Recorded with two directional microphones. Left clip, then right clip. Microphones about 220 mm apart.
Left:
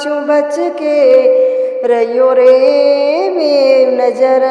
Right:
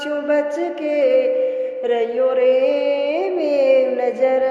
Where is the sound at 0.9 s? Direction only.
35° left (ahead or behind).